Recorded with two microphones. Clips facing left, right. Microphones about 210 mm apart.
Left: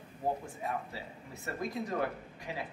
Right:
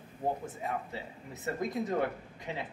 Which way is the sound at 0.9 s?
20° right (ahead or behind).